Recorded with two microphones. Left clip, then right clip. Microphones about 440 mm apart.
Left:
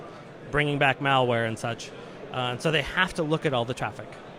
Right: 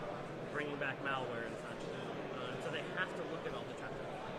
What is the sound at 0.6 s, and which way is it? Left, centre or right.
Speech, left.